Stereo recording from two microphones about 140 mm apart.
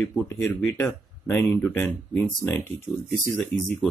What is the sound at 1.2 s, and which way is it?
Speech, 15° left (ahead or behind).